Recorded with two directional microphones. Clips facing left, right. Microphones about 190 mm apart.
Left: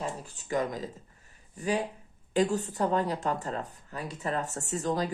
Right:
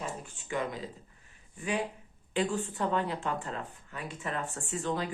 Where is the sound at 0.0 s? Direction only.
40° left (ahead or behind).